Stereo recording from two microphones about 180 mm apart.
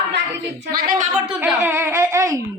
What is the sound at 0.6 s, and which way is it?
Speech, 55° right (ahead or behind).